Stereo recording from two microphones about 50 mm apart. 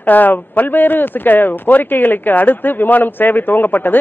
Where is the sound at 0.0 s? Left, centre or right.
Left.